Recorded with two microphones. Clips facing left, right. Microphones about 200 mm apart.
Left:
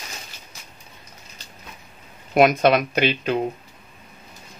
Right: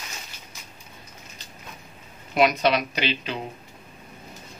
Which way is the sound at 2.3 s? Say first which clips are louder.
Left 5 dB; 50° left (ahead or behind).